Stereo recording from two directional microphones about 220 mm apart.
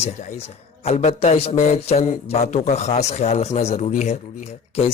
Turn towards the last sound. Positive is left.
turn(degrees=30)  # may be behind; listen again after turning